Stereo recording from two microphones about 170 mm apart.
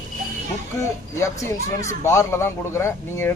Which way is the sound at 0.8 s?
15° left (ahead or behind).